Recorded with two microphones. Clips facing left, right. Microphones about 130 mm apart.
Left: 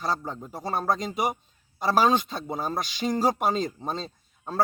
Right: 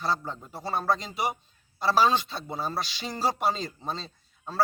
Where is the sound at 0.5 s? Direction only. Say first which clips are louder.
Left 1 dB; 45° left (ahead or behind).